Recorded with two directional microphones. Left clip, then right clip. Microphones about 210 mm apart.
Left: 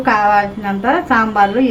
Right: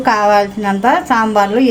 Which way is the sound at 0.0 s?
40° right (ahead or behind).